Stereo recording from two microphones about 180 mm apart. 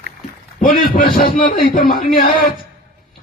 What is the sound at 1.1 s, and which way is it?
Speech, 55° left (ahead or behind).